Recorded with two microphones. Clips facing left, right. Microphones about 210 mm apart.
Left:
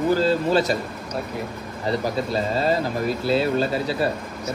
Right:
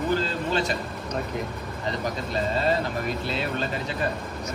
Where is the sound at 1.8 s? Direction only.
35° left (ahead or behind).